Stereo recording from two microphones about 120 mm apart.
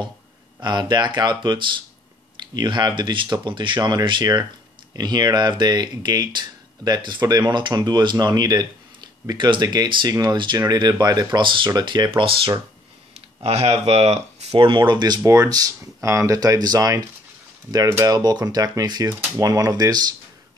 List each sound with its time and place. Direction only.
0.6 s speech: 40° right (ahead or behind)
13.4 s speech: 55° right (ahead or behind); by 20.1 s 35° right (ahead or behind)